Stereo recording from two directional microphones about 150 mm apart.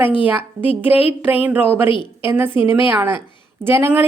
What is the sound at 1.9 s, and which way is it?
Speech, 30° left (ahead or behind).